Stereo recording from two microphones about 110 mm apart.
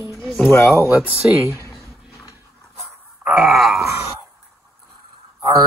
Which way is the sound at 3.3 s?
5° right (ahead or behind).